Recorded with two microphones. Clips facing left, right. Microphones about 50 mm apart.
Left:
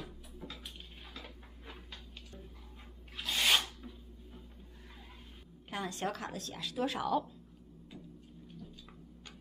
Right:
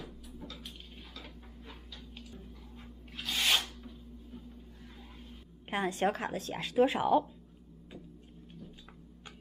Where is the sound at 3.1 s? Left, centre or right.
Centre.